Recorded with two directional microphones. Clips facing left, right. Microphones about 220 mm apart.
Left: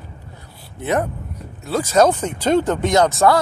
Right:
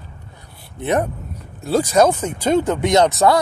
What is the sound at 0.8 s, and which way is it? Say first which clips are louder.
Speech: right 1 dB; 20° right (ahead or behind).